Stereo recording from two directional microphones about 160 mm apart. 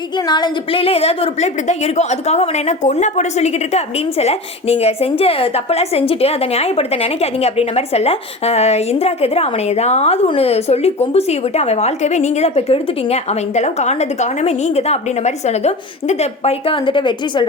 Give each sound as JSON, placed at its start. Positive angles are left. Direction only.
{"t": 0.3, "sound": "a woman's voice", "side_deg": 25}